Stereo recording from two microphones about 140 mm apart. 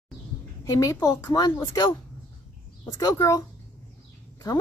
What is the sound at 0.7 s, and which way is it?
Speech, 25° left (ahead or behind).